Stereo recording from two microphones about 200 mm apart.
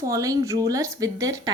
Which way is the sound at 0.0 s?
15° right (ahead or behind).